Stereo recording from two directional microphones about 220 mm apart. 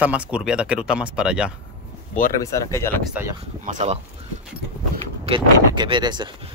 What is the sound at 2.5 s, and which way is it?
Speech, 15° left (ahead or behind).